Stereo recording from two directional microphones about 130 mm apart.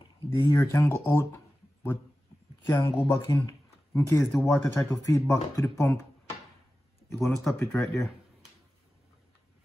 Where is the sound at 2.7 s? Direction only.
35° left (ahead or behind).